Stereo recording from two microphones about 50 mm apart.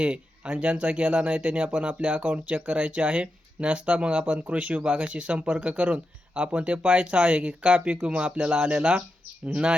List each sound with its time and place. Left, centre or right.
0.0 s speech: right